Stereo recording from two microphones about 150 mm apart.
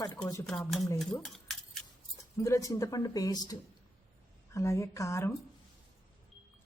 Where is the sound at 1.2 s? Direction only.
Centre (ahead or behind).